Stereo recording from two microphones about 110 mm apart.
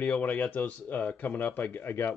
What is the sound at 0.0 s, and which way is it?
Speech, 10° left (ahead or behind).